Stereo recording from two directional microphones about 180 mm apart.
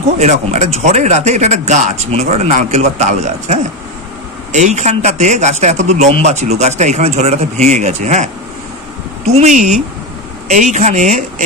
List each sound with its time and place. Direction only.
0.2 s a man's voice: 40° right (ahead or behind)